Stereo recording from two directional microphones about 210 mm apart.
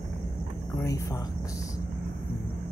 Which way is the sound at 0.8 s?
15° left (ahead or behind).